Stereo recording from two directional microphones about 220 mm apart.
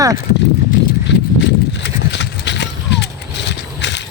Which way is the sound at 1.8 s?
55° left (ahead or behind).